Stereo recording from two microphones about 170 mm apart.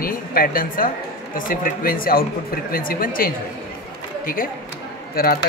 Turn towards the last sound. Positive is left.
turn(degrees=60)  # may be behind; listen again after turning